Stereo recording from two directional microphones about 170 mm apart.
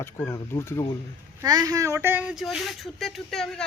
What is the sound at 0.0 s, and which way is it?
Speech, 15° left (ahead or behind).